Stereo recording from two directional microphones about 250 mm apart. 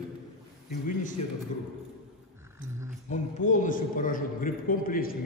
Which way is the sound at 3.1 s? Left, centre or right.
Left.